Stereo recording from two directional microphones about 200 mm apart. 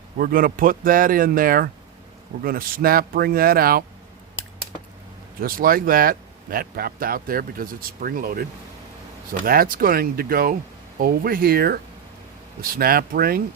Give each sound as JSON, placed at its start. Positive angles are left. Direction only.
{"t": 0.2, "sound": "speech", "side_deg": -45}
{"t": 5.4, "sound": "speech", "side_deg": -45}
{"t": 9.5, "sound": "speech", "side_deg": -45}